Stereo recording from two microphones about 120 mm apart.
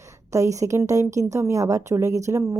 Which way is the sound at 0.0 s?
25° right (ahead or behind).